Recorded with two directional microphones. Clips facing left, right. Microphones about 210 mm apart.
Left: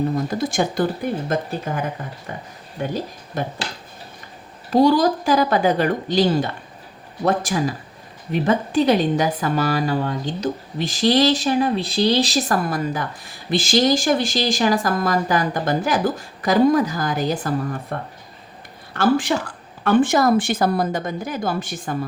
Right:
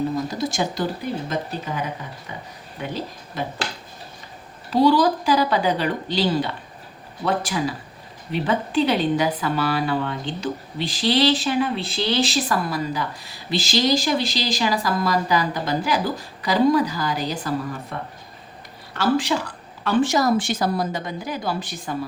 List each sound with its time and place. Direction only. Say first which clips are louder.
0.3 s a woman's voice: left 3 dB; 55° left (ahead or behind)
4.7 s a woman's voice: left 2 dB; 45° left (ahead or behind)
18.9 s a woman's voice: left 2 dB; 50° left (ahead or behind)